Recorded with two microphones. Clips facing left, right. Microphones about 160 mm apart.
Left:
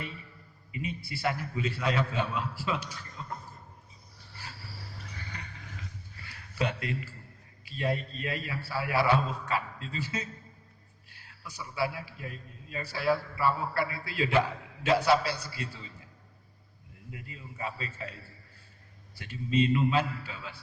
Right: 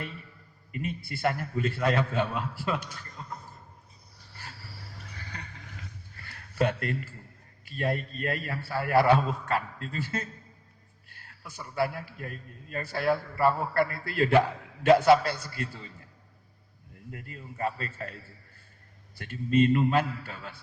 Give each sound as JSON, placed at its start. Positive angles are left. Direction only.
{"t": 0.7, "sound": "a man's voice", "side_deg": -50}
{"t": 6.1, "sound": "a sound", "side_deg": -50}
{"t": 7.6, "sound": "a man's voice", "side_deg": -50}
{"t": 17.1, "sound": "a man's voice", "side_deg": -50}